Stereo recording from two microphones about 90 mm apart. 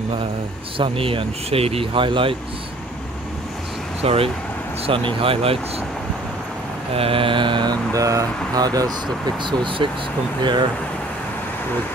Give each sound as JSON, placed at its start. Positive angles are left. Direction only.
{"t": 0.7, "sound": "speech", "side_deg": -80}
{"t": 4.0, "sound": "speech", "side_deg": -90}
{"t": 6.9, "sound": "mantra", "side_deg": -90}
{"t": 7.9, "sound": "speech", "side_deg": -40}